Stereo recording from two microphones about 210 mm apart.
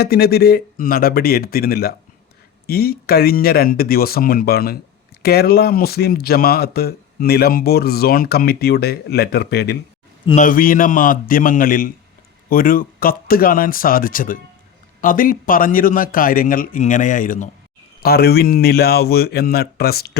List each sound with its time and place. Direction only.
0.0 s a man's voice: 50° left (ahead or behind)